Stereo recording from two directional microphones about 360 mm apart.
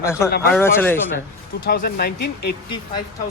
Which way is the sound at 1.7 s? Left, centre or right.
Left.